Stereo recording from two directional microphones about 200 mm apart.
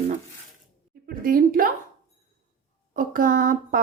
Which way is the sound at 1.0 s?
45° right (ahead or behind).